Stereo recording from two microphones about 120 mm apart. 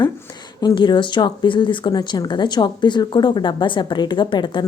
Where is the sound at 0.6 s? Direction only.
35° left (ahead or behind).